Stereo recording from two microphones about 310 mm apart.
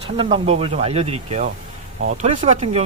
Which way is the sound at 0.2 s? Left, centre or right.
Centre.